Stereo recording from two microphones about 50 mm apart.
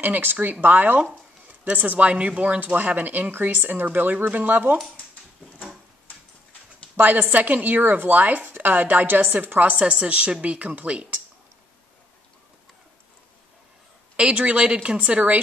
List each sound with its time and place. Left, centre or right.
0.0 s speech: right
7.0 s speech: right
9.8 s a woman's voice: right
14.1 s a woman's voice: right
15.0 s speech: right